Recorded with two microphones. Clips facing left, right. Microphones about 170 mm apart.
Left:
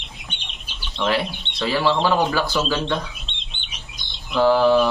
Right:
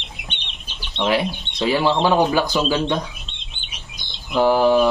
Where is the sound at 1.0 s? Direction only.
15° right (ahead or behind).